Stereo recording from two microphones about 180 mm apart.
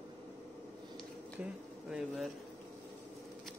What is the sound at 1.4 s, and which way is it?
Speech, centre (ahead or behind).